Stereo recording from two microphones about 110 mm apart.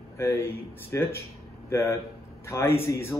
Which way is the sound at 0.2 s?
25° left (ahead or behind).